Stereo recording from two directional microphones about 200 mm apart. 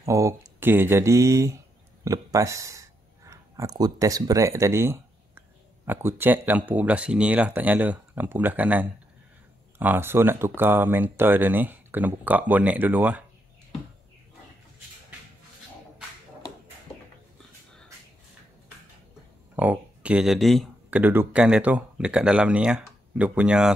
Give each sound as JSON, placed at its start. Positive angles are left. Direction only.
{"t": 0.0, "sound": "speech", "side_deg": -15}
{"t": 19.5, "sound": "speech", "side_deg": -10}